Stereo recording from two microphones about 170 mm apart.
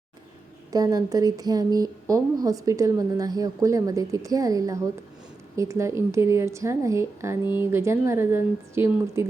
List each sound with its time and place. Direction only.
0.7 s a woman's voice: 20° right (ahead or behind)